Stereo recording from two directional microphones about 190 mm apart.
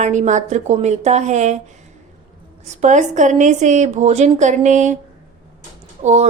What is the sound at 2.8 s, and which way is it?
A woman's voice, 40° right (ahead or behind).